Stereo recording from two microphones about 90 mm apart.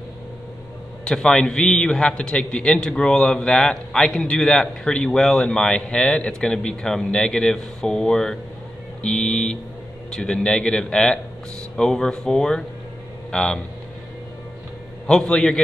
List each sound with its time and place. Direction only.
1.0 s a man's voice: 10° left (ahead or behind)
15.0 s a man's voice: 5° left (ahead or behind)